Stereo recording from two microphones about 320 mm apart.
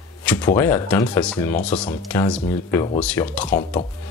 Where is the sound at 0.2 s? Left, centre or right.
Centre.